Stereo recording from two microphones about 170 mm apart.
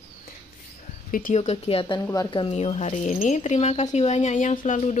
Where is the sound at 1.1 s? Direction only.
50° left (ahead or behind).